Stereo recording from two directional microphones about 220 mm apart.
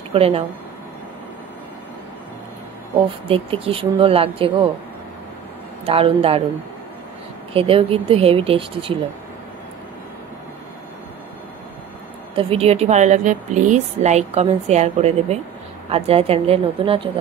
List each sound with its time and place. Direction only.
0.1 s speech: 25° right (ahead or behind)
3.3 s speech: 25° right (ahead or behind)
5.9 s speech: 25° right (ahead or behind)
7.5 s speech: 25° right (ahead or behind)
12.4 s speech: 25° right (ahead or behind)